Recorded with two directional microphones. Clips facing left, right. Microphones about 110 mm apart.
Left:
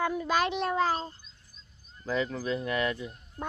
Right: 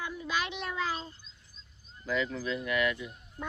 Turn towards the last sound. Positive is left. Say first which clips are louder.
# left 1 dB
turn(degrees=35)  # may be behind; listen again after turning